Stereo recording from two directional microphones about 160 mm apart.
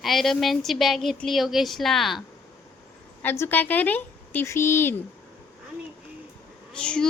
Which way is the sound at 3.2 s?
15° left (ahead or behind).